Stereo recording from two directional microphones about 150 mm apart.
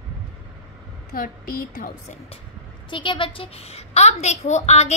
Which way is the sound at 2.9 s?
35° left (ahead or behind).